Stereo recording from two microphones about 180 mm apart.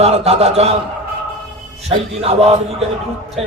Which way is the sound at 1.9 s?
35° right (ahead or behind).